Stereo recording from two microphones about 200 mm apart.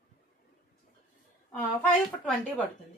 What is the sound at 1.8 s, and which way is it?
Speech, 5° left (ahead or behind).